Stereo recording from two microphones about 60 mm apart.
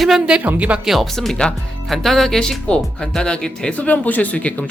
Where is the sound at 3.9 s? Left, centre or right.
Left.